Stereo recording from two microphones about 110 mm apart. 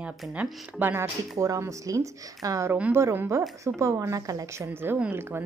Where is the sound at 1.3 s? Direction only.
30° right (ahead or behind).